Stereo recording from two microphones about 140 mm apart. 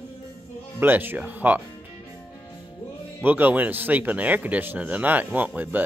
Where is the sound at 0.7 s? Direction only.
15° right (ahead or behind).